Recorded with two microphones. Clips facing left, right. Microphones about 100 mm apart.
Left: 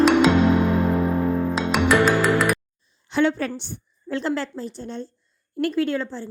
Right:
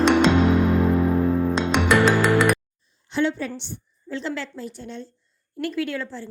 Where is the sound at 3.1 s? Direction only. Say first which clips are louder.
Left 3 dB; 60° left (ahead or behind).